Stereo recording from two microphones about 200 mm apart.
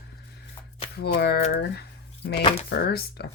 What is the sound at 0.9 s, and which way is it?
Speech, 55° left (ahead or behind).